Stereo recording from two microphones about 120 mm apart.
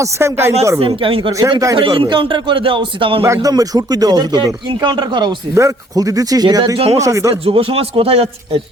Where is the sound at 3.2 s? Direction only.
25° right (ahead or behind).